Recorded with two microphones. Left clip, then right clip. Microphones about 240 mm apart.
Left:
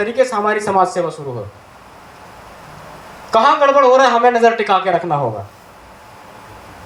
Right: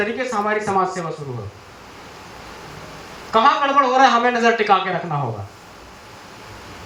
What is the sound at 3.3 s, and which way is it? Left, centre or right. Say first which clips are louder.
Speech: left 4 dB; left.